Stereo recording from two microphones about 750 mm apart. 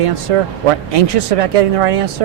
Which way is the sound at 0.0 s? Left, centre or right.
Right.